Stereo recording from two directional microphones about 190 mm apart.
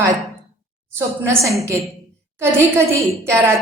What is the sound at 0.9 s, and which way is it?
Speech, 15° right (ahead or behind).